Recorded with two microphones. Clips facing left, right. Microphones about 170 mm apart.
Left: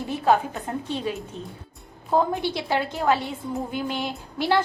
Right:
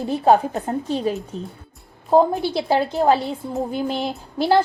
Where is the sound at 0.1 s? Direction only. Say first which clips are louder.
Right 5 dB; 40° right (ahead or behind).